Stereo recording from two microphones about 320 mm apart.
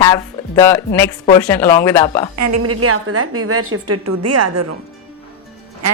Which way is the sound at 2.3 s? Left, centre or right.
Right.